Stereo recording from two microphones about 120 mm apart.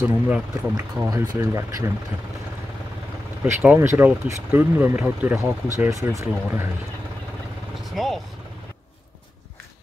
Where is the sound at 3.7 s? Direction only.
20° right (ahead or behind).